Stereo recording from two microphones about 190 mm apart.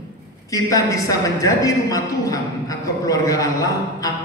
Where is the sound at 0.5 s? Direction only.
15° left (ahead or behind).